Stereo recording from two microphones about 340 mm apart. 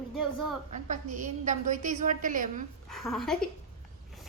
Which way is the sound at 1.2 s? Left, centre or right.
Right.